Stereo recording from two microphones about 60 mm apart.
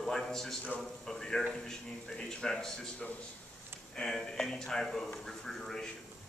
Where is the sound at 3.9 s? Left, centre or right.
Centre.